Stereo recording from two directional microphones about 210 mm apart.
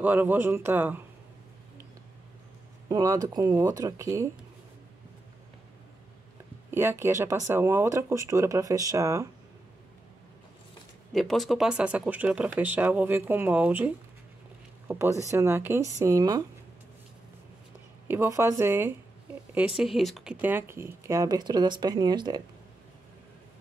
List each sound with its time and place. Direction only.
0.0 s speech: 10° right (ahead or behind)
2.9 s speech: 15° right (ahead or behind)
6.7 s speech: 10° right (ahead or behind)
11.1 s speech: centre (ahead or behind); by 16.4 s 15° right (ahead or behind)
18.0 s speech: 10° right (ahead or behind)
19.8 s speech: centre (ahead or behind); by 22.4 s 20° right (ahead or behind)